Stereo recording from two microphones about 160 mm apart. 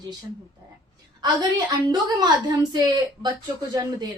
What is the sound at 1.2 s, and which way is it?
A woman's voice, 25° right (ahead or behind).